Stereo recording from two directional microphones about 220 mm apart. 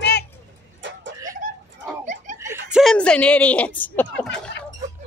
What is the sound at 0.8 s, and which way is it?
Chicken, 55° right (ahead or behind).